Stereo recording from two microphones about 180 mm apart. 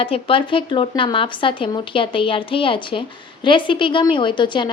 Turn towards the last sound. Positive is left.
turn(degrees=25)  # may be behind; listen again after turning